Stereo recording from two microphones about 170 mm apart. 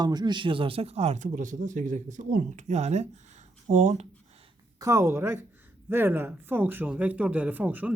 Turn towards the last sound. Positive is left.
turn(degrees=-10)  # may be behind; listen again after turning